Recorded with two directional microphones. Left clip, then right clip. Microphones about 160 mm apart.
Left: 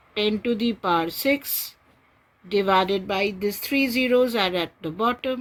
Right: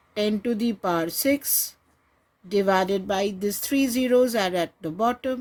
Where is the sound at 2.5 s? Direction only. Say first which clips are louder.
Left 1 dB; 65° right (ahead or behind).